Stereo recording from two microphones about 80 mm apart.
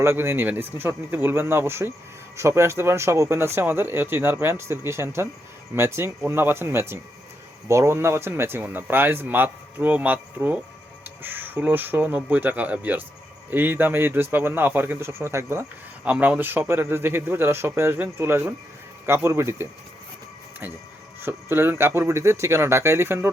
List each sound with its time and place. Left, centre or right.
0.0 s a man's voice: right
16.0 s a man's voice: centre; by 19.6 s right
21.2 s speech: right